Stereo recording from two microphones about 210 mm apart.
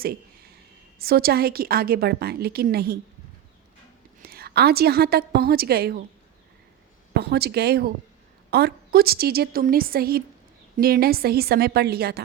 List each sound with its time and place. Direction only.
0.0 s a sound: 45° right (ahead or behind)
0.9 s a woman's voice: 45° right (ahead or behind)
4.2 s a woman's voice: 50° right (ahead or behind)
7.1 s a woman's voice: 50° right (ahead or behind)